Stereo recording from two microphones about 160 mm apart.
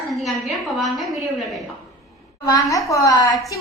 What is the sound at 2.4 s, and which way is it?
Speech, 20° left (ahead or behind).